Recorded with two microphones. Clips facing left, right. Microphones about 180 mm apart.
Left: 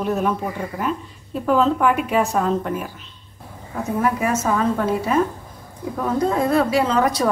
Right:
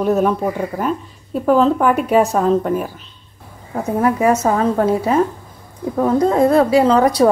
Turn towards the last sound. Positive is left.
turn(degrees=-35)  # may be behind; listen again after turning